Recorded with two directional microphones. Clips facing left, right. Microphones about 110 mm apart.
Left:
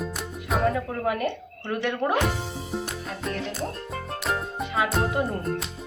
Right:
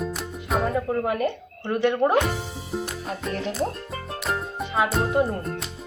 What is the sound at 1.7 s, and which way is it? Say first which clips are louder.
Speech: right 5 dB; 25° right (ahead or behind).